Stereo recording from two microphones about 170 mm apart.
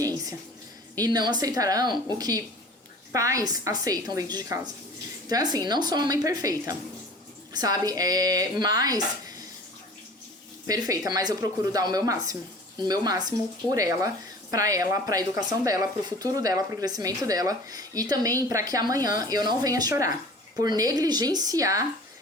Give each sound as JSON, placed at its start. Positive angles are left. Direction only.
{"t": 0.0, "sound": "a sound", "side_deg": -20}
{"t": 0.9, "sound": "speech", "side_deg": -25}
{"t": 10.7, "sound": "speech", "side_deg": -20}